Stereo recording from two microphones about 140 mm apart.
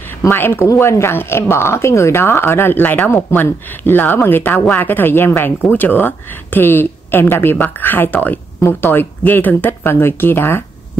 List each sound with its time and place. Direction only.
0.2 s speech: 15° left (ahead or behind)